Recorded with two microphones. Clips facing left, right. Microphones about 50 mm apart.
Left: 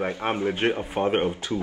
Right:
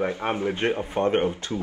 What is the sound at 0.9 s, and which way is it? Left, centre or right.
Speech, centre.